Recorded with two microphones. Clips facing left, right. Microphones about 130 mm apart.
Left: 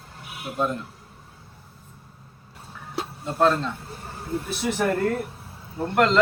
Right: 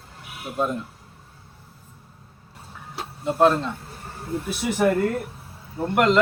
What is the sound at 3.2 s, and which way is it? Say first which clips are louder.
Speech: right 3 dB; 15° right (ahead or behind).